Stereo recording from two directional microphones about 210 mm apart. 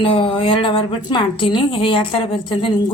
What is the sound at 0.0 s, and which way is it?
A woman's voice, 25° left (ahead or behind).